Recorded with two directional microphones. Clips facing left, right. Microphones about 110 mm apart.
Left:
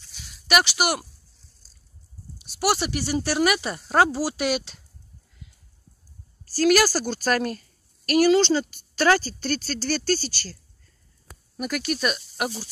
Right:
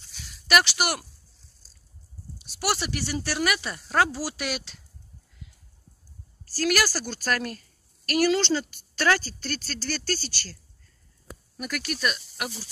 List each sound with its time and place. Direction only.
0.5 s speech: 10° left (ahead or behind)
2.6 s speech: 15° left (ahead or behind)
6.5 s speech: 25° left (ahead or behind)
8.0 s speech: 15° left (ahead or behind)